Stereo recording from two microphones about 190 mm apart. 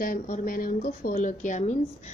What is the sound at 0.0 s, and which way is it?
A woman's voice, 45° left (ahead or behind).